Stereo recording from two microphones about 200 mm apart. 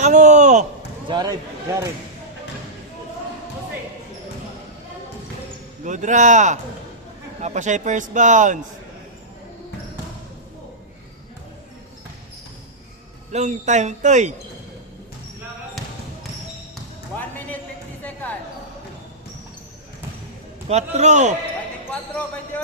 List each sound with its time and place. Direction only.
0.0 s a sound: 35° right (ahead or behind)
1.0 s speech: 20° right (ahead or behind)
5.8 s a man's voice: 40° right (ahead or behind)
13.3 s a man's voice: 35° right (ahead or behind)
17.2 s a sound: 10° left (ahead or behind)
20.7 s a man's voice: 35° right (ahead or behind)